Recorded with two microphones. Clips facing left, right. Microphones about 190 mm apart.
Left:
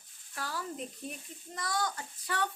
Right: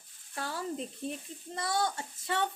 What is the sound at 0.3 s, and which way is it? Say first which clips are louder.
A woman's voice: right 3 dB; 25° right (ahead or behind).